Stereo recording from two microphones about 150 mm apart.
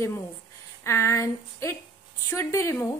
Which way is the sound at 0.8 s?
20° left (ahead or behind).